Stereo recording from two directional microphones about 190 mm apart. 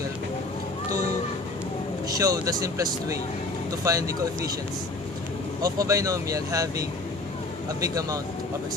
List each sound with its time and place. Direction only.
2.0 s speech: 20° right (ahead or behind)
5.6 s speech: 20° right (ahead or behind)